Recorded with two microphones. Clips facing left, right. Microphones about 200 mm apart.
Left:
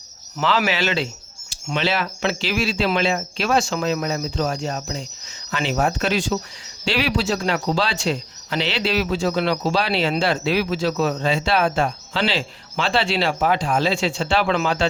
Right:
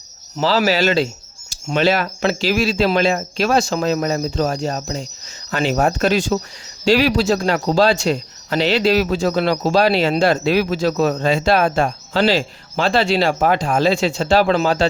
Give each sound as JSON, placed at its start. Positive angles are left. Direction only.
{"t": 0.3, "sound": "speech", "side_deg": -35}